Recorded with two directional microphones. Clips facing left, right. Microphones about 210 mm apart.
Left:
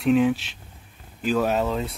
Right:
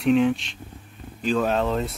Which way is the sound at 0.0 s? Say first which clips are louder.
Even; 5° left (ahead or behind).